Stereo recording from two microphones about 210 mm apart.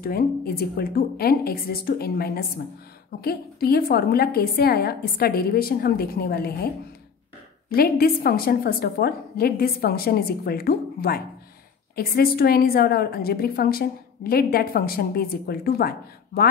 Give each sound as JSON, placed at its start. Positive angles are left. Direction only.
{"t": 0.0, "sound": "a woman's voice", "side_deg": 45}
{"t": 7.7, "sound": "a woman's voice", "side_deg": 45}